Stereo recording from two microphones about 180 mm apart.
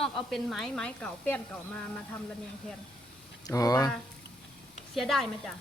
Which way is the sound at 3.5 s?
20° left (ahead or behind).